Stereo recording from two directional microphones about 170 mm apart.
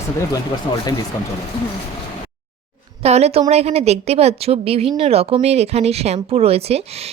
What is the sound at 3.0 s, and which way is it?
Speech, 40° right (ahead or behind).